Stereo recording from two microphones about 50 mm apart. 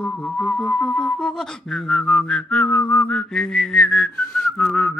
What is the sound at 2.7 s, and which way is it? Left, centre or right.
Whistling, left.